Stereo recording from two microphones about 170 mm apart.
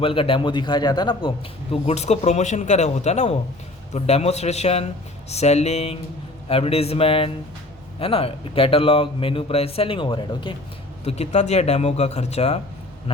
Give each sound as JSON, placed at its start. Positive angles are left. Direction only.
{"t": 0.0, "sound": "a man's voice", "side_deg": 30}
{"t": 1.7, "sound": "speech", "side_deg": 40}